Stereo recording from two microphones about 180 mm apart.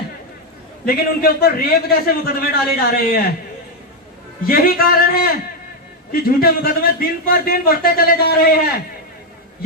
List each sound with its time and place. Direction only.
0.9 s a man's voice: 55° left (ahead or behind)
4.4 s a man's voice: 55° left (ahead or behind)